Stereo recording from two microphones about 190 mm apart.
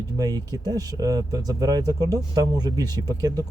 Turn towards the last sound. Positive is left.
turn(degrees=-20)  # may be behind; listen again after turning